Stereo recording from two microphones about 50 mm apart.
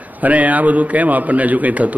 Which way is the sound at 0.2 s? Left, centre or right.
Right.